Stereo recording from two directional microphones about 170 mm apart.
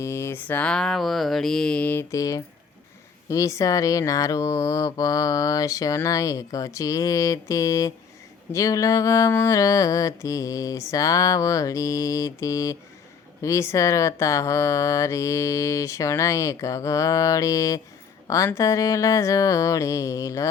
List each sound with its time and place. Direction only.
0.0 s speech: 15° left (ahead or behind)